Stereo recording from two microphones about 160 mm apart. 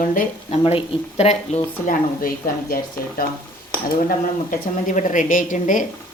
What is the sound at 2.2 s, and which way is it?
Speech, 65° left (ahead or behind).